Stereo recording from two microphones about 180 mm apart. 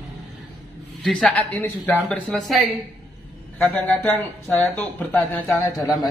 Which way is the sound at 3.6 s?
Centre (ahead or behind).